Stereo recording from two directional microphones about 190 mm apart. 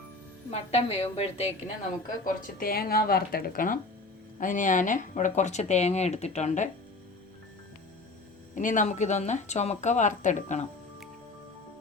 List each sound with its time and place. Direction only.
0.7 s speech: 30° left (ahead or behind)
2.2 s speech: 50° left (ahead or behind)
8.5 s speech: 45° left (ahead or behind)